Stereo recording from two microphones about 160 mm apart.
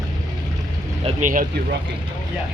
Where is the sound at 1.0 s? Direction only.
55° right (ahead or behind).